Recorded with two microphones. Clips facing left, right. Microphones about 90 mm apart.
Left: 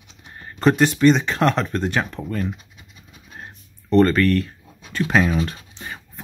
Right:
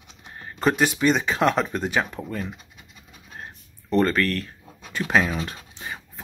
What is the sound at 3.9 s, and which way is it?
Speech, centre (ahead or behind).